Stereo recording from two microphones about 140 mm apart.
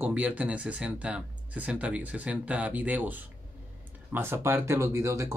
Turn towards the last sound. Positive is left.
turn(degrees=-20)  # may be behind; listen again after turning